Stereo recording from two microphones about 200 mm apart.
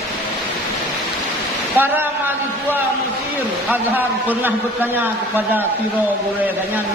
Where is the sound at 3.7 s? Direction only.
10° right (ahead or behind).